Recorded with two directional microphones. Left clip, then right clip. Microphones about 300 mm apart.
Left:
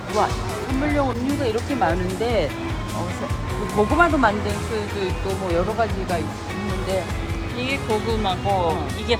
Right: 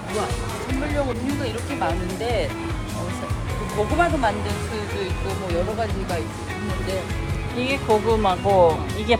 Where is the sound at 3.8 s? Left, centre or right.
Left.